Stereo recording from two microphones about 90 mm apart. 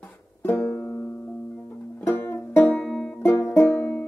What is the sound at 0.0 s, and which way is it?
Music, 30° left (ahead or behind).